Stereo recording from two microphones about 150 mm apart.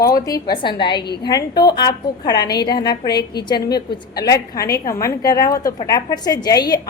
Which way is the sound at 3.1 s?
90° left.